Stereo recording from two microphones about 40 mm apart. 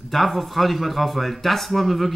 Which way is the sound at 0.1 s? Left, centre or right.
Centre.